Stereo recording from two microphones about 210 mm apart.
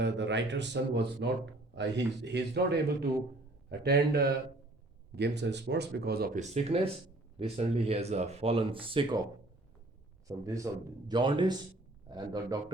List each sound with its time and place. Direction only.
0.0 s a man's voice: 55° right (ahead or behind)
6.5 s speech: 30° right (ahead or behind)
10.2 s speech: 15° right (ahead or behind)